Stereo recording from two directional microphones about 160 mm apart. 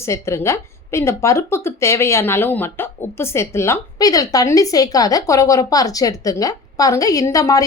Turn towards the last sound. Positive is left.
turn(degrees=20)  # may be behind; listen again after turning